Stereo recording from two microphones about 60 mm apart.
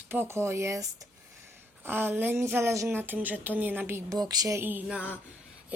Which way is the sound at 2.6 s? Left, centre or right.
Right.